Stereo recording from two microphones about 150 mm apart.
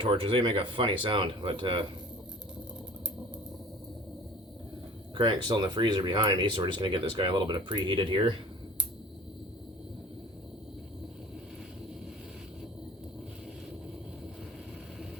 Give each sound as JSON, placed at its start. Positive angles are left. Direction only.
{"t": 0.0, "sound": "speech", "side_deg": -35}
{"t": 5.1, "sound": "speech", "side_deg": -30}